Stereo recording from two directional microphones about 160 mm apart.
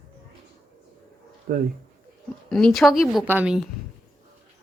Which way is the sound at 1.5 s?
60° right (ahead or behind).